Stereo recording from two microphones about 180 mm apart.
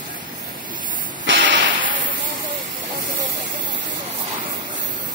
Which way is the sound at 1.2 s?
85° right.